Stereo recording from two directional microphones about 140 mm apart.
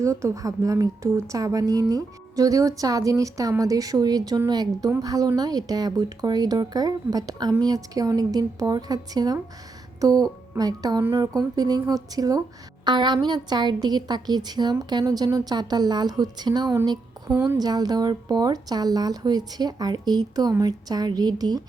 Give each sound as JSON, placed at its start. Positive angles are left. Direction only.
{"t": 0.0, "sound": "a woman's voice", "side_deg": -20}